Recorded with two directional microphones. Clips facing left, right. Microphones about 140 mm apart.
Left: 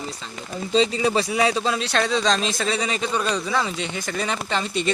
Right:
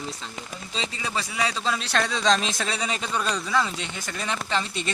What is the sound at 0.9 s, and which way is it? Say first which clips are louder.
A man's voice: left 9 dB; 25° left (ahead or behind).